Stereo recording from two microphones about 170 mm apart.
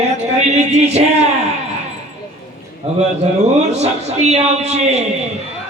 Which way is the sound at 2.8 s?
35° right (ahead or behind).